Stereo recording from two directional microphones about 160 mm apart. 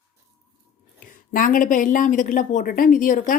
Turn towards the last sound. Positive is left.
turn(degrees=55)  # may be behind; listen again after turning